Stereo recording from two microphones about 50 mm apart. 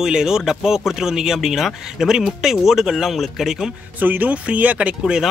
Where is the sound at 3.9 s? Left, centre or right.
Right.